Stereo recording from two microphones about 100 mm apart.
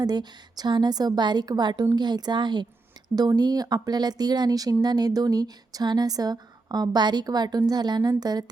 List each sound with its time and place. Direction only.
0.0 s a woman's voice: 40° right (ahead or behind)